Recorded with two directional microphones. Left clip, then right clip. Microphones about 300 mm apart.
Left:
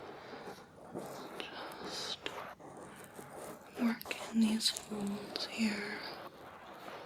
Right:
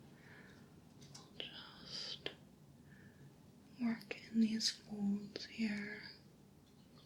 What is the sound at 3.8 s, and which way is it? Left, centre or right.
Whispering, centre.